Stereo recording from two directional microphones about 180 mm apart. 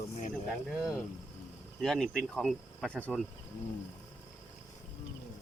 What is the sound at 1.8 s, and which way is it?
Speech, centre (ahead or behind).